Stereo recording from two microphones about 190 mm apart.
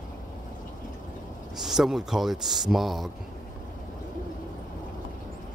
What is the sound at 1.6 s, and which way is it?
Speech, centre (ahead or behind).